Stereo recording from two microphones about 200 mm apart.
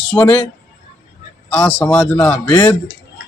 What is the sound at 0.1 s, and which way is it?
Speech, 10° left (ahead or behind).